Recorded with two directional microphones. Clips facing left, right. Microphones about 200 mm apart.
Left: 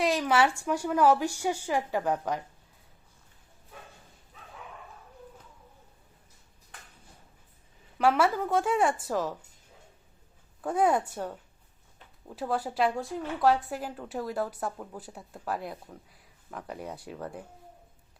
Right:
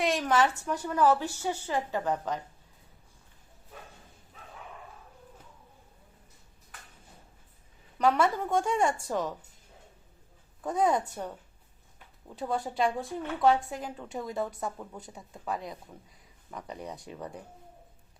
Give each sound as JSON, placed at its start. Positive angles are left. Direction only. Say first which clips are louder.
{"t": 0.0, "sound": "a woman's voice", "louder": "left 1 dB", "side_deg": 0}
{"t": 7.9, "sound": "a woman's voice", "louder": "left 1 dB", "side_deg": 5}
{"t": 10.6, "sound": "a woman's voice", "louder": "left 1 dB", "side_deg": 5}
{"t": 12.4, "sound": "a woman's voice", "louder": "left 1 dB", "side_deg": 5}